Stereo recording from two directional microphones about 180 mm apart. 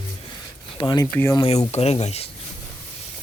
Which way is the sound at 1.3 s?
25° left (ahead or behind).